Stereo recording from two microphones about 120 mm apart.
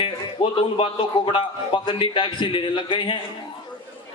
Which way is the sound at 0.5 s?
45° left (ahead or behind).